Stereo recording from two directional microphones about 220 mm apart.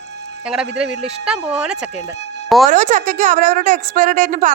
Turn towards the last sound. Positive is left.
turn(degrees=-35)  # may be behind; listen again after turning